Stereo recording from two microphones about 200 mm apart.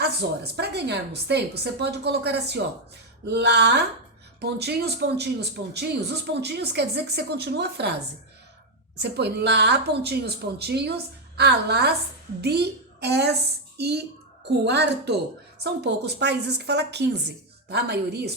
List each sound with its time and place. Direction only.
0.0 s a woman's voice: 55° right (ahead or behind)
9.0 s a woman's voice: 55° right (ahead or behind)